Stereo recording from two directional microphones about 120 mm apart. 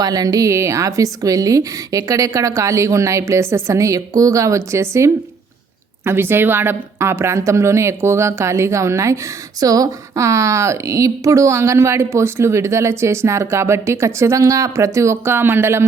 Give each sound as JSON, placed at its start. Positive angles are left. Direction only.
{"t": 0.0, "sound": "a woman's voice", "side_deg": -35}